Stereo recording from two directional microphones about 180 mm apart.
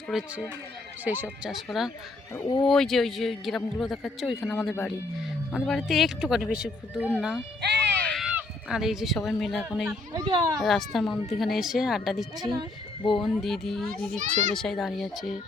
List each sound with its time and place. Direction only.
0.1 s a man's voice: 5° right (ahead or behind)
2.3 s speech: 20° left (ahead or behind)
2.6 s a man's voice: centre (ahead or behind)
7.6 s music: 65° right (ahead or behind)
8.0 s a sound: 5° left (ahead or behind)
8.4 s speech: 5° right (ahead or behind)
10.1 s a child's voice: 25° right (ahead or behind)
10.6 s a man's voice: centre (ahead or behind)
13.0 s speech: 25° left (ahead or behind)
13.2 s a man's voice: centre (ahead or behind)
14.2 s a child's voice: 40° right (ahead or behind)
14.5 s a man's voice: centre (ahead or behind)